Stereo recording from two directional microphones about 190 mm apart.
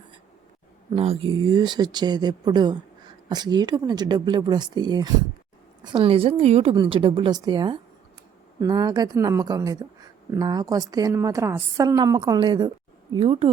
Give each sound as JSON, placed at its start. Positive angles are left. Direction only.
{"t": 0.9, "sound": "a woman's voice", "side_deg": -30}